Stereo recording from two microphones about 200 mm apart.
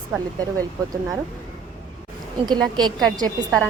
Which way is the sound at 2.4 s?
20° right (ahead or behind).